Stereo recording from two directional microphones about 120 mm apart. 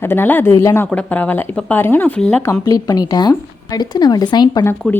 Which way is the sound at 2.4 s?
30° left (ahead or behind).